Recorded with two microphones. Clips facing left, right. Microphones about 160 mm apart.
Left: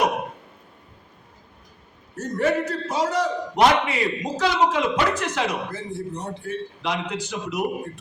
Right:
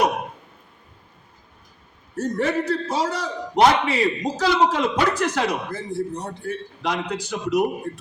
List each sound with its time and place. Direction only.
2.1 s a man's voice: 30° right (ahead or behind)